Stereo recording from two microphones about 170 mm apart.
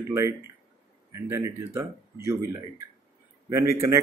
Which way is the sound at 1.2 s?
15° right (ahead or behind).